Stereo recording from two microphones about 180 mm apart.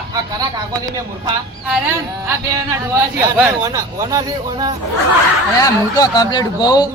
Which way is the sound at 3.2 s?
10° right (ahead or behind).